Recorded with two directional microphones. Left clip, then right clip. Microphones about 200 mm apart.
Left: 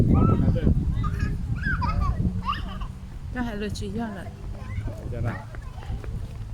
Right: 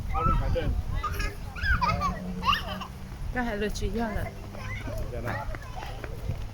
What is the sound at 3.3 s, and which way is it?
Speech, 10° left (ahead or behind).